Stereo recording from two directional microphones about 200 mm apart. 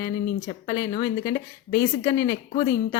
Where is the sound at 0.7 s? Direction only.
20° left (ahead or behind).